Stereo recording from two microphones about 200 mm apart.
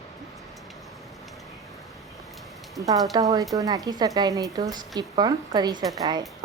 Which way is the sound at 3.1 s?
15° right (ahead or behind).